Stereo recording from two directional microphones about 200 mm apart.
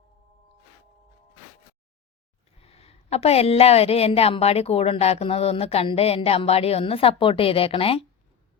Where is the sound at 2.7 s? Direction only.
30° left (ahead or behind).